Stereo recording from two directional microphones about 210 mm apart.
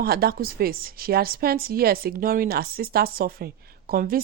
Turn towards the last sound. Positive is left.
turn(degrees=-45)  # may be behind; listen again after turning